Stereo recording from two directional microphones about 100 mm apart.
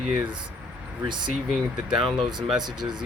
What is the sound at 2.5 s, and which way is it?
Speech, 45° right (ahead or behind).